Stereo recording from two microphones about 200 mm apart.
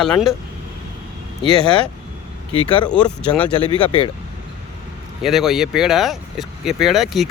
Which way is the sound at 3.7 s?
25° left (ahead or behind).